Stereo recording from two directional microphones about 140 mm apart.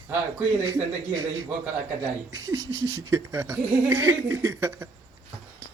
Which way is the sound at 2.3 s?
25° right (ahead or behind).